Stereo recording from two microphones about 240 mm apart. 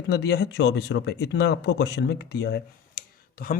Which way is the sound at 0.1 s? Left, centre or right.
Left.